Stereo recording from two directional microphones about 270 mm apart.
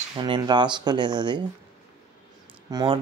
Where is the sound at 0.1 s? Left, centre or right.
Centre.